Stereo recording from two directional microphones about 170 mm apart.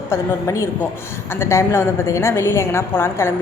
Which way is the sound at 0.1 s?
15° left (ahead or behind).